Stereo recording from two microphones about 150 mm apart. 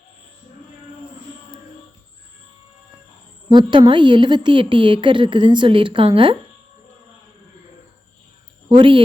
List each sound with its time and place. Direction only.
3.5 s a woman's voice: 30° right (ahead or behind)
8.7 s a woman's voice: 35° right (ahead or behind)